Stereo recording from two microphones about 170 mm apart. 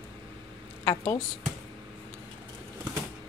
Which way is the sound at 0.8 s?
25° left (ahead or behind).